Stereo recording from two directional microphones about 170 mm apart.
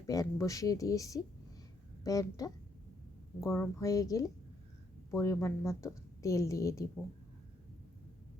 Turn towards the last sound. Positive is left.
turn(degrees=20)  # may be behind; listen again after turning